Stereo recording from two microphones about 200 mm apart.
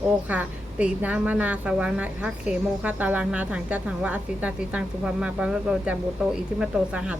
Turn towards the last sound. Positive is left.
turn(degrees=-5)  # may be behind; listen again after turning